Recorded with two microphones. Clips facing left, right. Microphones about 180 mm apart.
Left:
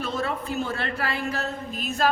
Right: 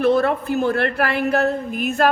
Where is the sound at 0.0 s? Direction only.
60° right (ahead or behind).